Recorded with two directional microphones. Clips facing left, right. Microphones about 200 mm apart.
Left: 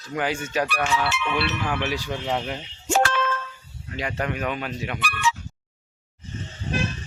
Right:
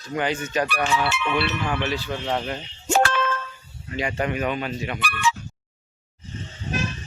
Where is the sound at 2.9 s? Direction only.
55° right (ahead or behind).